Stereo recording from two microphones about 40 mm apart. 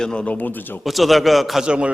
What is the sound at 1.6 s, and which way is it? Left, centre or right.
Speech, right.